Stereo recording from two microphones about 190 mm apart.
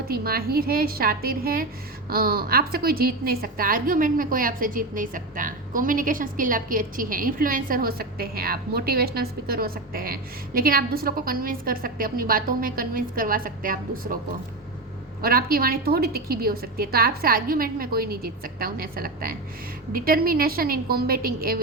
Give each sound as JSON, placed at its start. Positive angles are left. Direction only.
{"t": 0.1, "sound": "a woman's voice", "side_deg": -50}
{"t": 15.2, "sound": "a woman's voice", "side_deg": -50}